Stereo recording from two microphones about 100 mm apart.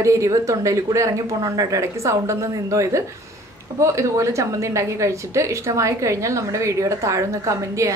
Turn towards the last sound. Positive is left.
turn(degrees=-30)  # may be behind; listen again after turning